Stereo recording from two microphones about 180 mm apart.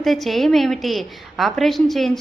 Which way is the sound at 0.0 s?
Centre (ahead or behind).